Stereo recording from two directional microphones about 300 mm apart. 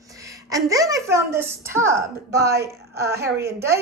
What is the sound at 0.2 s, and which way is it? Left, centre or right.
A woman's voice, centre.